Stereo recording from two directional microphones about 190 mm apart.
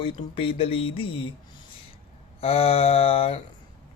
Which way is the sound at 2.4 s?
30° left (ahead or behind).